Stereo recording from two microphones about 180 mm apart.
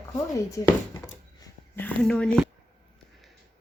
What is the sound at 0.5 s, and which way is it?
Speech, 15° left (ahead or behind).